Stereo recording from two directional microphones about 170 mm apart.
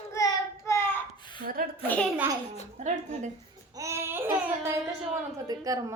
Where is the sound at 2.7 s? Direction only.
45° right (ahead or behind).